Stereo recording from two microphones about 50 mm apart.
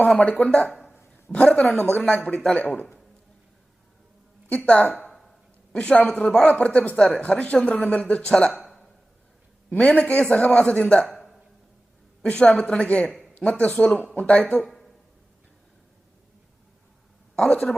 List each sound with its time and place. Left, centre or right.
0.2 s speech: left; by 2.6 s centre
4.4 s a woman's voice: left
9.7 s speech: left
11.1 s a sound: centre
12.2 s speech: left
13.1 s a sound: centre
13.4 s speech: left
14.6 s a sound: centre
17.3 s speech: centre